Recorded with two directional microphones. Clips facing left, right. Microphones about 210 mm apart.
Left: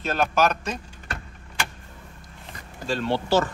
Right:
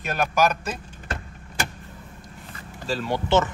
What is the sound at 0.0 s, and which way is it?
Speech, 10° right (ahead or behind).